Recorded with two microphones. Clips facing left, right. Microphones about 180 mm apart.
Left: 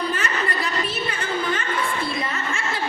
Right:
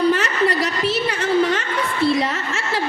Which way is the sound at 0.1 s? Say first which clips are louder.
Right 7 dB; 75° right (ahead or behind).